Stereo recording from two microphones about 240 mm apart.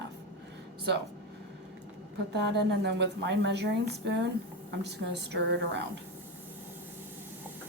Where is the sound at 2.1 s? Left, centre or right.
Right.